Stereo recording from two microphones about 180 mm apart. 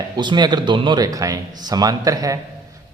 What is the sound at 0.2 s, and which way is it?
A man's voice, 25° right (ahead or behind).